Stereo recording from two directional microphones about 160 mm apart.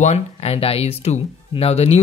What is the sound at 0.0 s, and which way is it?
Speech, 40° left (ahead or behind).